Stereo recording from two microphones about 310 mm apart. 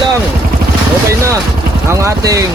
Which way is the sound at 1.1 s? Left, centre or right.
Centre.